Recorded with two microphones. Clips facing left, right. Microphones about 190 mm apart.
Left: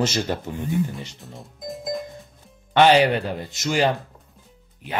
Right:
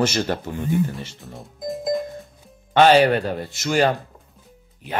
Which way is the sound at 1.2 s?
Centre (ahead or behind).